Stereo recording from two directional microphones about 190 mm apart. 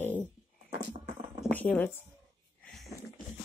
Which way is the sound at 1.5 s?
10° left (ahead or behind).